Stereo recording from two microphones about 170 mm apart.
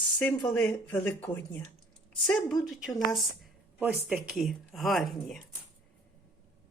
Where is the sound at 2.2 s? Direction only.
Centre (ahead or behind).